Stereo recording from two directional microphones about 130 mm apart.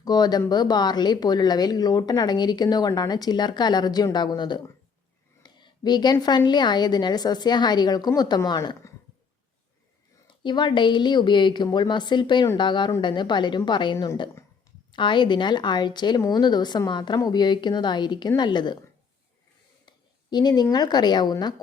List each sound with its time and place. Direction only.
0.0 s speech: 30° left (ahead or behind)
10.2 s speech: 35° left (ahead or behind)
14.9 s speech: 35° left (ahead or behind)
20.3 s speech: 30° left (ahead or behind)